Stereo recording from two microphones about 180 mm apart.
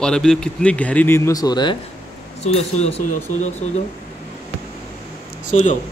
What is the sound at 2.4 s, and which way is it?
Speech, 35° left (ahead or behind).